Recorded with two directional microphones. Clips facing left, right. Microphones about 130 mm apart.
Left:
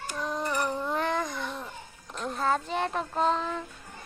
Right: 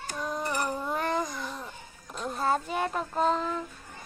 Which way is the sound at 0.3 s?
5° right (ahead or behind).